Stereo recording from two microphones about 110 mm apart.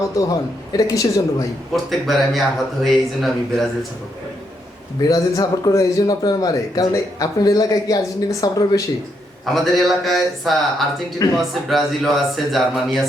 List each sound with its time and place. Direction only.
0.2 s speech: 35° left (ahead or behind)
1.7 s speech: centre (ahead or behind)
5.0 s speech: 35° left (ahead or behind)
9.6 s speech: centre (ahead or behind)